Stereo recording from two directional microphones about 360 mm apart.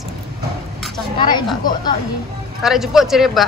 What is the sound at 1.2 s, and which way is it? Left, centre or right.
Speech, centre.